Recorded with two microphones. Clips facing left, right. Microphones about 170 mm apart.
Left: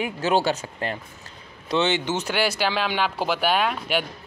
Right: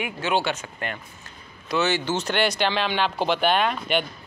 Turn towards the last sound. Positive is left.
turn(degrees=5)  # may be behind; listen again after turning